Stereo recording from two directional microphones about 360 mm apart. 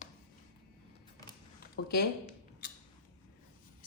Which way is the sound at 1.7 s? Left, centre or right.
Left.